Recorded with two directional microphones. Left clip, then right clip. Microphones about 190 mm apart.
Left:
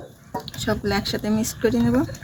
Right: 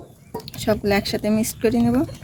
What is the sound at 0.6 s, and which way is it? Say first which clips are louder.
Speech: right 4 dB; 40° right (ahead or behind).